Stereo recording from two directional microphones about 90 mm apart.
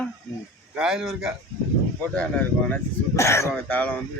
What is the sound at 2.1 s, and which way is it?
Speech, 15° left (ahead or behind).